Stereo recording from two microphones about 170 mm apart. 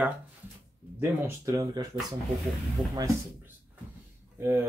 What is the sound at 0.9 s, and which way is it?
Speech, 15° right (ahead or behind).